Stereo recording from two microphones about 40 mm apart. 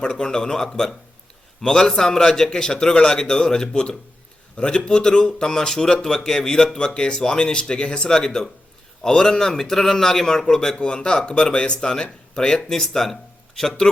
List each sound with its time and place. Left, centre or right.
0.0 s speech: centre